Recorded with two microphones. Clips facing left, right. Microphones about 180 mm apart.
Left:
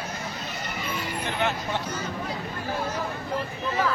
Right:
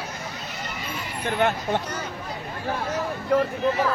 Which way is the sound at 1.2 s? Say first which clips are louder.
Right 6 dB; 50° right (ahead or behind).